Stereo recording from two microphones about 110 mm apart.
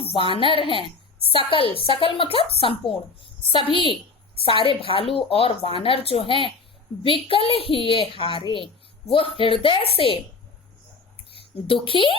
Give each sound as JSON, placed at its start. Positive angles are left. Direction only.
{"t": 0.0, "sound": "a woman's voice", "side_deg": 55}
{"t": 11.3, "sound": "a woman's voice", "side_deg": 55}